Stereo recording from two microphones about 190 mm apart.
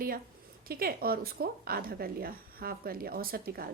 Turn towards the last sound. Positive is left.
turn(degrees=-50)  # may be behind; listen again after turning